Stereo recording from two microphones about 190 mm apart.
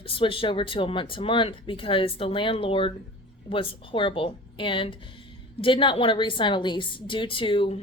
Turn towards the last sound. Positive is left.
turn(degrees=30)  # may be behind; listen again after turning